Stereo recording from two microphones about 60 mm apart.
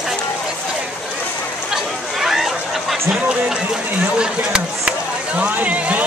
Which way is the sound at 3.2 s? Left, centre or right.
Right.